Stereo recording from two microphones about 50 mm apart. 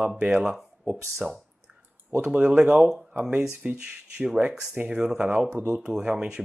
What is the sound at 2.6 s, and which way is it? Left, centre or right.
Speech, centre.